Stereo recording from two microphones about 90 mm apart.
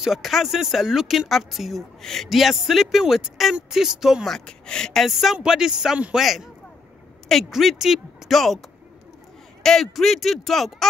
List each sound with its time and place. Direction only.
0.0 s speech: 5° right (ahead or behind)
4.5 s speech: 10° left (ahead or behind)